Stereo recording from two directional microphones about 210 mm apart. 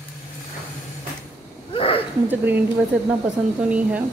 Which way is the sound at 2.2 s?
10° right (ahead or behind).